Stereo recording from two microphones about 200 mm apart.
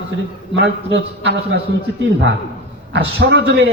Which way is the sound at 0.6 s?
60° right (ahead or behind).